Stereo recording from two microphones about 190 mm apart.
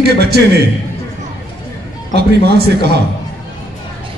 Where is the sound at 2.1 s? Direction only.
60° right (ahead or behind).